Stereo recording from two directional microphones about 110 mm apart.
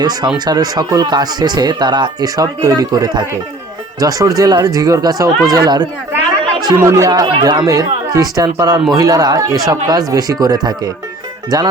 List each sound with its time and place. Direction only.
0.0 s speech: 40° right (ahead or behind)